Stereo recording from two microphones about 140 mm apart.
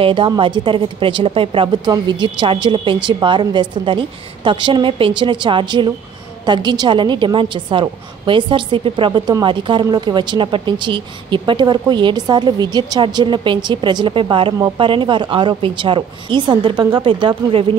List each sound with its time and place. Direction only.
0.0 s a woman's voice: 40° right (ahead or behind)